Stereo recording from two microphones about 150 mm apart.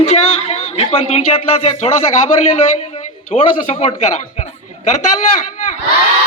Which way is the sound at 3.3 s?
50° left (ahead or behind).